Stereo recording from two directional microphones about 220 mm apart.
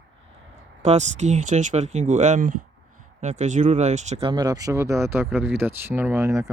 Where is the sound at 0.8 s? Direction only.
30° right (ahead or behind).